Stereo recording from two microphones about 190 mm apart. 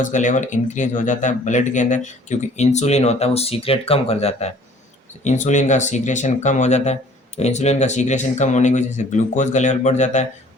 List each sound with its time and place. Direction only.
0.0 s speech: 40° left (ahead or behind)